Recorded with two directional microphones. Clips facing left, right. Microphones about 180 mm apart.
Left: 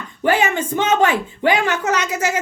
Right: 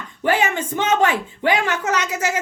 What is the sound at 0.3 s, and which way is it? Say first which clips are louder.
Speech: left 2 dB; 20° left (ahead or behind).